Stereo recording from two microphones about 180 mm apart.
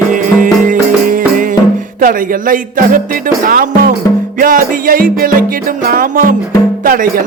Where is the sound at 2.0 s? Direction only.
50° right (ahead or behind).